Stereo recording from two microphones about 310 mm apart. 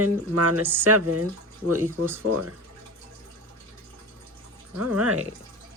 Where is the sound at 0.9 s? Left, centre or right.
Right.